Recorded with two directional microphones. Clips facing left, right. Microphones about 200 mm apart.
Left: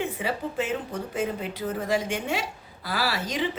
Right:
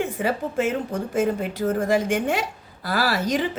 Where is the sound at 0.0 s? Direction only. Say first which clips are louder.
Right 4 dB; 45° right (ahead or behind).